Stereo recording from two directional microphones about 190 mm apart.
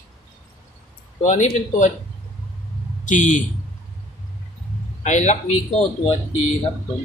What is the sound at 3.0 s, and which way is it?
Speech, 40° left (ahead or behind).